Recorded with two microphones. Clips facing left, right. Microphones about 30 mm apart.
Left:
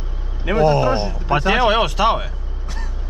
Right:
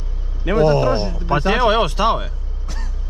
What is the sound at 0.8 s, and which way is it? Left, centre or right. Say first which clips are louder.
Speech: even; left.